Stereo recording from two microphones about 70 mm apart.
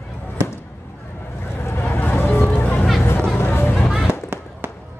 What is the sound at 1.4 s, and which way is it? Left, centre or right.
Vehicle, left.